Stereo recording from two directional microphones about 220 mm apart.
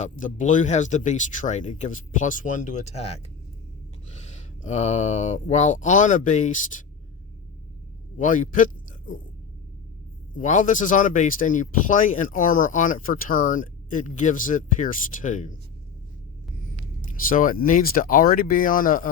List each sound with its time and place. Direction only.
0.0 s speech: 35° left (ahead or behind)
8.2 s speech: 35° left (ahead or behind)
10.3 s speech: 35° left (ahead or behind)
17.2 s speech: 40° left (ahead or behind)